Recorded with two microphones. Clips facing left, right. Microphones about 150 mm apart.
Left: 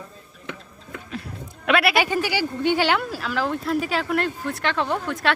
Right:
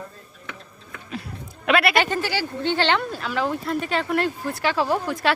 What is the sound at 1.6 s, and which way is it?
Speech, centre (ahead or behind).